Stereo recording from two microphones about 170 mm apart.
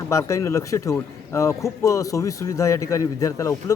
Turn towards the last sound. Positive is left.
turn(degrees=20)  # may be behind; listen again after turning